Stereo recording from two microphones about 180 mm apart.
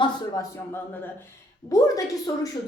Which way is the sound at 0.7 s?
10° left (ahead or behind).